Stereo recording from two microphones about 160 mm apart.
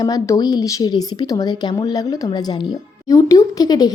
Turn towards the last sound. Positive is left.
turn(degrees=25)  # may be behind; listen again after turning